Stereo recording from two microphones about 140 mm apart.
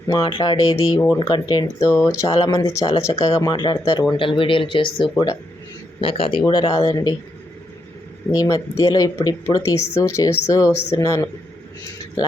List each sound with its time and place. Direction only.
0.1 s speech: 30° left (ahead or behind)
6.4 s speech: 30° left (ahead or behind)
8.3 s speech: 25° left (ahead or behind)